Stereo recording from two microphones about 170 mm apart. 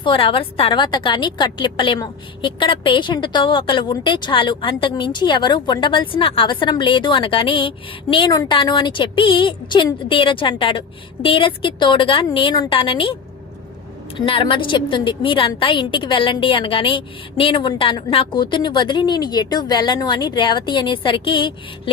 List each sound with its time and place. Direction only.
0.0 s a woman's voice: 30° left (ahead or behind)
14.3 s a woman's voice: 30° left (ahead or behind)